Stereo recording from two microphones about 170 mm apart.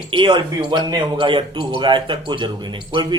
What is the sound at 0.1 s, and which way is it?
Speech, 30° right (ahead or behind).